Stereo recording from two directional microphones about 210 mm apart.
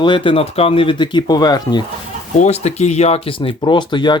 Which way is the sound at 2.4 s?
30° left (ahead or behind).